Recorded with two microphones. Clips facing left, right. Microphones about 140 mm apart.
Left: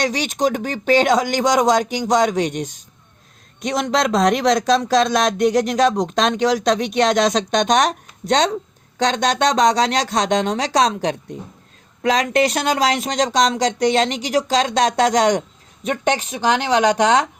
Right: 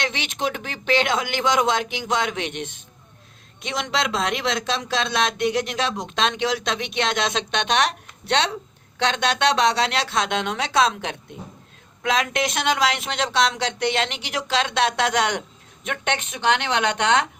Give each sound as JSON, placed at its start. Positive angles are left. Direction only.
{"t": 0.0, "sound": "speech", "side_deg": 40}